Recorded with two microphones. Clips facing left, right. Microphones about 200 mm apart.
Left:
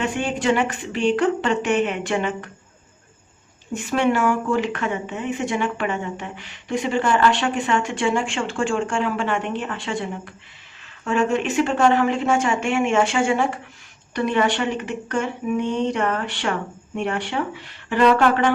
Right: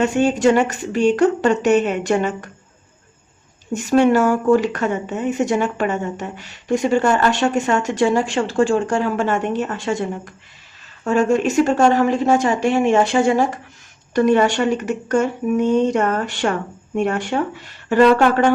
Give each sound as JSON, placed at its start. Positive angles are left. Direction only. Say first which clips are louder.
{"t": 0.0, "sound": "speech", "louder": "right 7 dB", "side_deg": -40}
{"t": 3.7, "sound": "speech", "louder": "right 6 dB", "side_deg": -40}